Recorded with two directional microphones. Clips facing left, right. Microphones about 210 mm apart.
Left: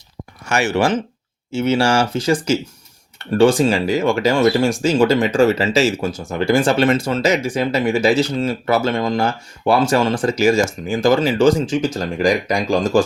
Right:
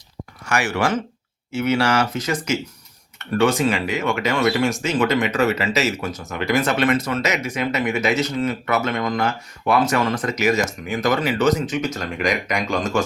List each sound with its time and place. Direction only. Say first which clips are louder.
0.4 s speech: left 4 dB; 25° left (ahead or behind)